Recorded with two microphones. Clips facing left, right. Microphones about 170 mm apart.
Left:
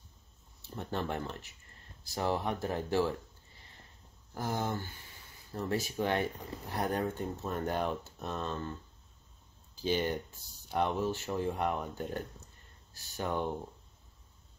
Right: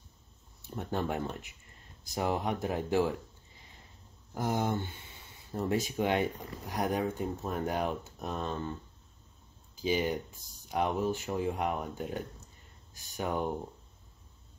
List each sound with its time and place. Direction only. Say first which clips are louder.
0.7 s speech: right 3 dB; 10° right (ahead or behind)
4.3 s speech: right 3 dB; 20° right (ahead or behind)
9.8 s speech: right 1 dB; 5° right (ahead or behind)